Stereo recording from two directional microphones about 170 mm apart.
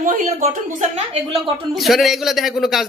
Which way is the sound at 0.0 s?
45° right (ahead or behind).